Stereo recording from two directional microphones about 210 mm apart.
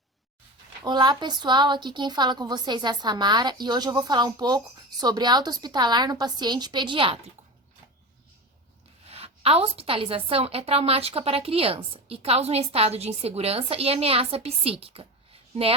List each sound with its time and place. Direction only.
0.9 s a woman's voice: 20° right (ahead or behind)
9.0 s a woman's voice: 30° right (ahead or behind)